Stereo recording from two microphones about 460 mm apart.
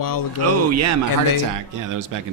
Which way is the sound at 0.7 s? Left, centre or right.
Right.